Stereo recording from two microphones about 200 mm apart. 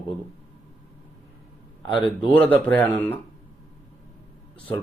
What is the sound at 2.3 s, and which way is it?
Speech, 5° left (ahead or behind).